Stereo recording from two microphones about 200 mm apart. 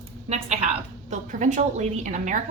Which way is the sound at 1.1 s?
40° right (ahead or behind).